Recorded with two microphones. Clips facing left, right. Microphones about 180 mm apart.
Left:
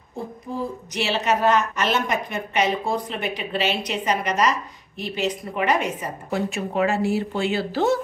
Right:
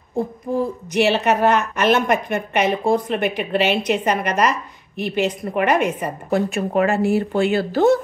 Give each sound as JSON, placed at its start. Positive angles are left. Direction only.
{"t": 0.9, "sound": "a woman's voice", "side_deg": -55}